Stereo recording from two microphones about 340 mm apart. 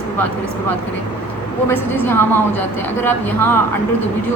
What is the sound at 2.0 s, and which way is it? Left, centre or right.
A woman's voice, centre.